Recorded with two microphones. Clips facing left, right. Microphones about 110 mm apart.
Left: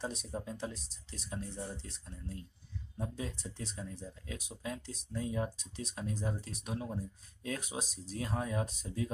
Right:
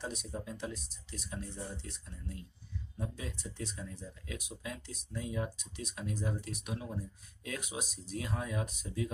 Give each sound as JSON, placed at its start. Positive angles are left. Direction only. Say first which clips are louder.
{"t": 0.0, "sound": "speech", "louder": "left 1 dB", "side_deg": 30}